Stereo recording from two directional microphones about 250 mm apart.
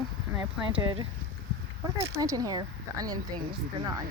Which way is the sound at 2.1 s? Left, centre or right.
Centre.